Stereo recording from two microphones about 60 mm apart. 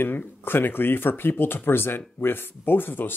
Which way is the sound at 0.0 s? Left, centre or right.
Left.